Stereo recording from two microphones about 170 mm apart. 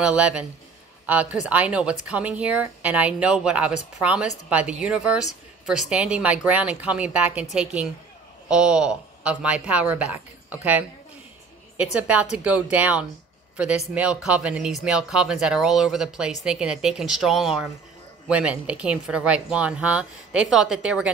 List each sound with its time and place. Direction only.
0.0 s a woman's voice: 5° right (ahead or behind)